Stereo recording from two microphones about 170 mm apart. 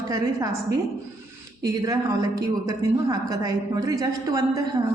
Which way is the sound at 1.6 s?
20° right (ahead or behind).